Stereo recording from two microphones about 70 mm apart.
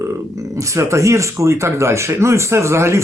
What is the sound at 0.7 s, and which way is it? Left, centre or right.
Speech, right.